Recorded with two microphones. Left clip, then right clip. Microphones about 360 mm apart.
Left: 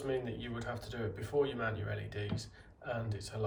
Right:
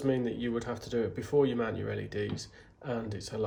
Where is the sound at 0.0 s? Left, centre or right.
Centre.